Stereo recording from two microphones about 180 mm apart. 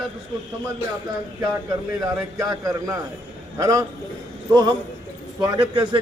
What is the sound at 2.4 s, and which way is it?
A man's voice, 20° right (ahead or behind).